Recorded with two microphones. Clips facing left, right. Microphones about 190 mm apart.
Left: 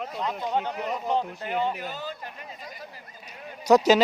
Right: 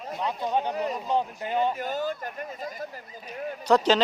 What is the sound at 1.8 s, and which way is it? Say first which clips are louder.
Speech: right 6 dB; 50° right (ahead or behind).